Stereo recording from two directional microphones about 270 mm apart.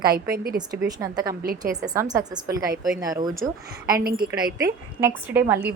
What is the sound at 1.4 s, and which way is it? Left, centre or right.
Speech, right.